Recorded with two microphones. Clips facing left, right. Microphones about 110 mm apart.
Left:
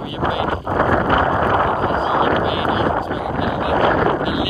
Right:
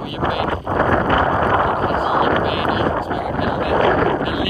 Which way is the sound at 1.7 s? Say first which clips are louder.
Even; 25° left (ahead or behind).